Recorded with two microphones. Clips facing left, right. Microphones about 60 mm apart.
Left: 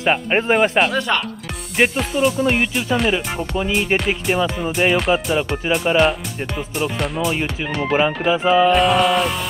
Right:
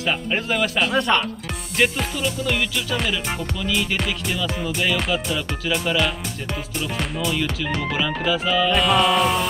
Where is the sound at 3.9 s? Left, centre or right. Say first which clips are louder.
Left 5 dB; centre.